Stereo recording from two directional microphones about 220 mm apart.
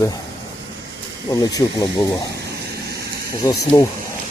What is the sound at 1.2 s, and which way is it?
Speech, 15° left (ahead or behind).